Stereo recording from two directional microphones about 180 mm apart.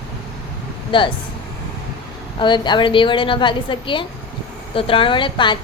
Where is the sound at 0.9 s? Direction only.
30° left (ahead or behind).